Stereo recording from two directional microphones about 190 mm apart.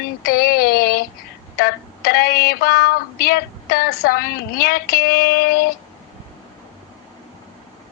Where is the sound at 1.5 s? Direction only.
50° left (ahead or behind).